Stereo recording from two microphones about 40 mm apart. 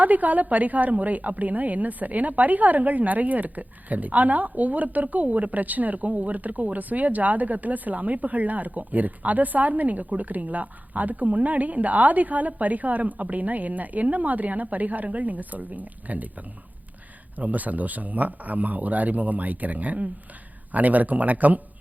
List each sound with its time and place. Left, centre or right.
0.0 s a woman's voice: right
17.3 s a woman's voice: right